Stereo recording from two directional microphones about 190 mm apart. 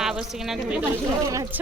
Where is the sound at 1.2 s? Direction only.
15° right (ahead or behind).